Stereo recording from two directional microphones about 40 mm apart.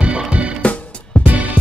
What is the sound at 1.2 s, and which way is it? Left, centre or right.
Music, right.